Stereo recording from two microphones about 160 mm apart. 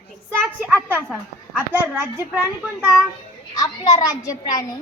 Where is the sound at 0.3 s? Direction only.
10° right (ahead or behind).